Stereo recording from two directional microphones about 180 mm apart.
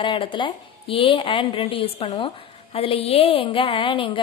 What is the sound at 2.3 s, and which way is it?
A woman's voice, 30° left (ahead or behind).